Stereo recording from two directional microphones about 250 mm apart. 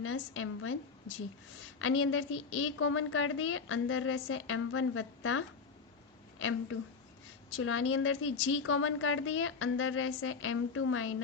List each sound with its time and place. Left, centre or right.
0.0 s a woman's voice: left
7.5 s a woman's voice: left